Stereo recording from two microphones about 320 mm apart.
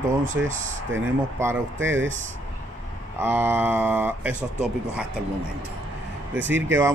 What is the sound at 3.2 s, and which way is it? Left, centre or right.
Speech, centre.